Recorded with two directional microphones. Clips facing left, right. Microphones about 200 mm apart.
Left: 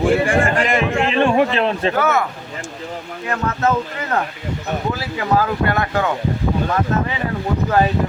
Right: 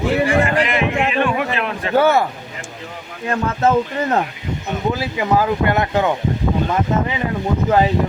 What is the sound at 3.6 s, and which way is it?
Speech, 25° right (ahead or behind).